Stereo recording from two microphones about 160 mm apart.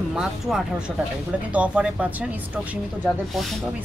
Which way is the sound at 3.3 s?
Centre (ahead or behind).